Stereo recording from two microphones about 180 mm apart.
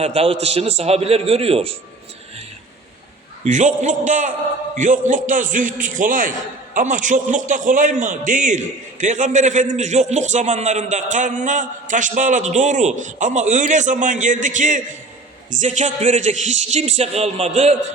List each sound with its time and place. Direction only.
0.0 s a man's voice: 35° right (ahead or behind)
3.4 s a man's voice: 40° right (ahead or behind)